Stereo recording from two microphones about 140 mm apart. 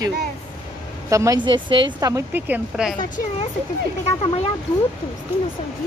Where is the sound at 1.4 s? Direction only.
35° right (ahead or behind).